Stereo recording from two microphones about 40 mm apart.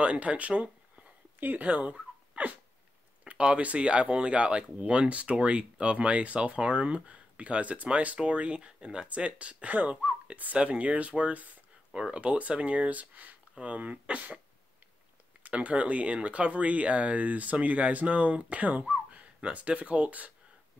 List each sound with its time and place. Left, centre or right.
0.0 s speech: right
11.9 s speech: right
15.4 s speech: right